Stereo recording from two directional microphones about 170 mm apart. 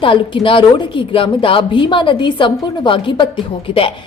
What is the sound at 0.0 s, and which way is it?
A woman's voice, 30° left (ahead or behind).